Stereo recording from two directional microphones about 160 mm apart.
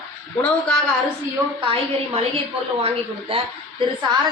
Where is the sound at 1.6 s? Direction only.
35° right (ahead or behind).